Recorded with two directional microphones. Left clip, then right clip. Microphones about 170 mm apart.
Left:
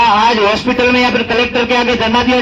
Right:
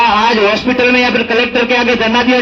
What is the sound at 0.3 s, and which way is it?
A man's voice, 30° right (ahead or behind).